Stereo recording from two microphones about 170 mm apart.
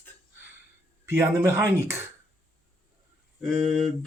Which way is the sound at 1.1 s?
15° right (ahead or behind).